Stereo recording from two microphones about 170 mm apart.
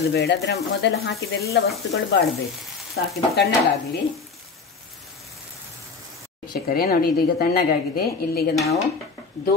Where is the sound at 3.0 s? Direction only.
90° left.